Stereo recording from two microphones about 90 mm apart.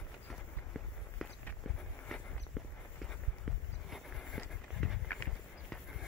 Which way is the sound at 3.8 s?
Centre (ahead or behind).